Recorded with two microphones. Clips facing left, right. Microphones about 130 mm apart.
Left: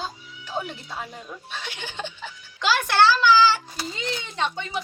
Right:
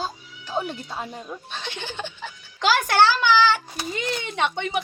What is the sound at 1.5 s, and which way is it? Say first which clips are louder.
Speech: even; 10° left (ahead or behind).